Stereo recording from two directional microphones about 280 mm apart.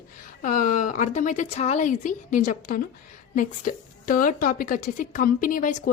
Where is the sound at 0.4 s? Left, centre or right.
Left.